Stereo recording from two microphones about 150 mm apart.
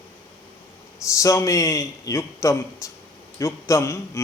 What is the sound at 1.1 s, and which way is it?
Speech, 20° left (ahead or behind).